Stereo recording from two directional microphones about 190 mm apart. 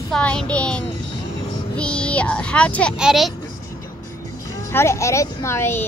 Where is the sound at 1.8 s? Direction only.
5° left (ahead or behind).